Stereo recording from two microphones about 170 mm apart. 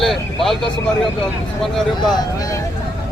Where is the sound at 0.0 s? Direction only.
Centre (ahead or behind).